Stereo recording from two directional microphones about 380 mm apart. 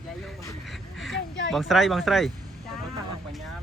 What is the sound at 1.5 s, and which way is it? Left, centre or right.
Speech, centre.